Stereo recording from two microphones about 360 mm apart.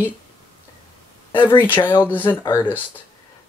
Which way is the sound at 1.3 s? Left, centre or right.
Centre.